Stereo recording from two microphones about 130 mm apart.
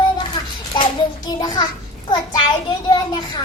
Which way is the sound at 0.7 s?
35° left (ahead or behind).